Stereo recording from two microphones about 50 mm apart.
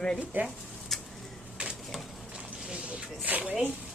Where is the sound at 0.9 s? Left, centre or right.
Centre.